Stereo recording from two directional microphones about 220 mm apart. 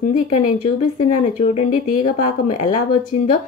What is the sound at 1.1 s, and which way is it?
Speech, 30° left (ahead or behind).